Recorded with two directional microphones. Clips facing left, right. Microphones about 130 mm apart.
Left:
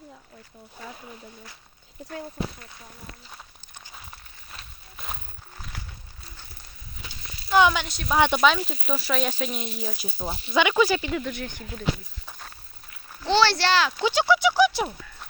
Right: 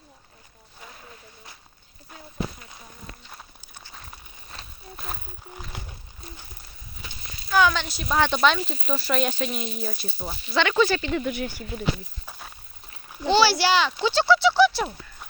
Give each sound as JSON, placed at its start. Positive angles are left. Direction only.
{"t": 4.9, "sound": "a sound", "side_deg": 0}
{"t": 5.7, "sound": "a sound", "side_deg": -20}
{"t": 7.4, "sound": "speech", "side_deg": 20}
{"t": 7.9, "sound": "speech", "side_deg": 0}
{"t": 8.1, "sound": "speech", "side_deg": 10}
{"t": 10.0, "sound": "speech", "side_deg": 15}
{"t": 11.2, "sound": "speech", "side_deg": -10}
{"t": 14.0, "sound": "speech", "side_deg": 15}